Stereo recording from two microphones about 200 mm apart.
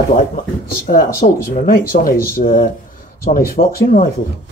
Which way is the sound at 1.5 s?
45° left (ahead or behind).